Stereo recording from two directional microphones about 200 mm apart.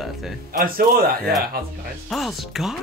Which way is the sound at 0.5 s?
45° right (ahead or behind).